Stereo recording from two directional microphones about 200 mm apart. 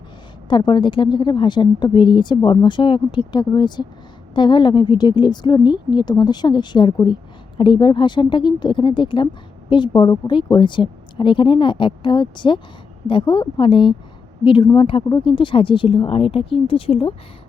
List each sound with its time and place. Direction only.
0.4 s speech: 25° left (ahead or behind)